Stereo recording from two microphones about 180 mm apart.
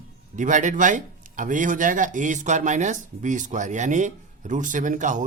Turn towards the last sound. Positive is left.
turn(degrees=-45)  # may be behind; listen again after turning